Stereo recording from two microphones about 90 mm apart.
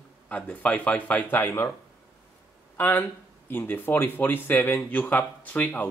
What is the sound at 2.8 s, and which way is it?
A man's voice, 20° left (ahead or behind).